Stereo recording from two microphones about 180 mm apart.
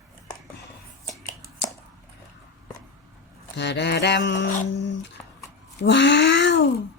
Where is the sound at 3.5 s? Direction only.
75° left (ahead or behind).